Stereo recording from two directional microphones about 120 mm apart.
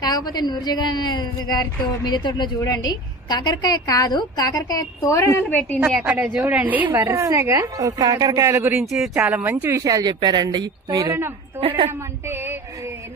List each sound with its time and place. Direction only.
0.0 s a woman's voice: 35° left (ahead or behind)
5.8 s a woman's voice: 10° right (ahead or behind)
8.8 s speech: centre (ahead or behind)
9.4 s speech: 15° right (ahead or behind)
9.8 s a woman's voice: 30° right (ahead or behind)
11.6 s a woman's voice: 50° right (ahead or behind)
11.9 s a woman's voice: 20° right (ahead or behind)